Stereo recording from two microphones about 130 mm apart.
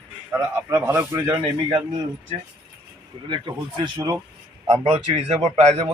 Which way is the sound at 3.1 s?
40° right (ahead or behind).